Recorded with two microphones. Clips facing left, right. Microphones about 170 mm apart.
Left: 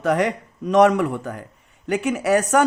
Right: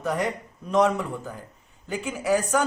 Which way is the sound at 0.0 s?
80° left.